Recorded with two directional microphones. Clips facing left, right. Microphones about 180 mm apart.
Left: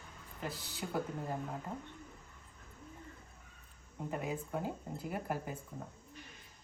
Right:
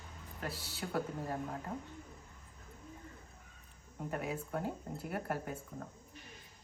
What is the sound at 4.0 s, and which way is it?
Speech, centre (ahead or behind).